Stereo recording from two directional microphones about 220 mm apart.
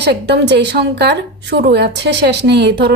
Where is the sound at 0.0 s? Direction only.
50° right (ahead or behind).